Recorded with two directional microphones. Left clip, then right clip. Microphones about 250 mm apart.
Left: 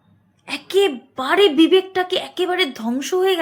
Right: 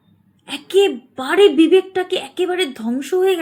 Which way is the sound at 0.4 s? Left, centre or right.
Centre.